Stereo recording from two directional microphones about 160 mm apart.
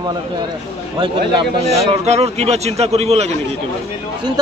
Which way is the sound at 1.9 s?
40° right (ahead or behind).